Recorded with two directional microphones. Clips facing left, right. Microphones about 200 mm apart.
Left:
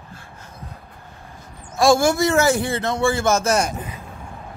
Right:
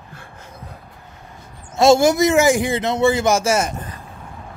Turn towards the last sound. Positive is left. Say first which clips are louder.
# right 1 dB
turn(degrees=-5)  # may be behind; listen again after turning